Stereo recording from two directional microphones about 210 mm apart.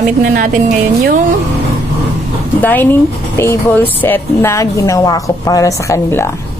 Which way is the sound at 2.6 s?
10° left (ahead or behind).